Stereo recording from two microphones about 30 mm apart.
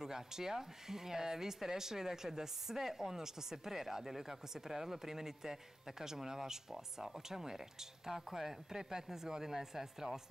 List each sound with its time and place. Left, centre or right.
0.0 s speech: centre